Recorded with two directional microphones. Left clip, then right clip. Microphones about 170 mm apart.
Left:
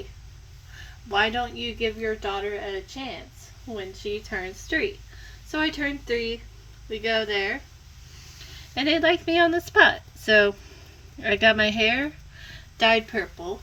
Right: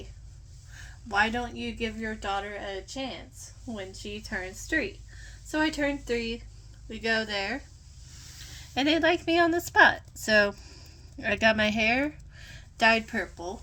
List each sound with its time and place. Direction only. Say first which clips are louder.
1.0 s a woman's voice: left 3 dB; 30° right (ahead or behind)
8.7 s a woman's voice: left 3 dB; 30° right (ahead or behind)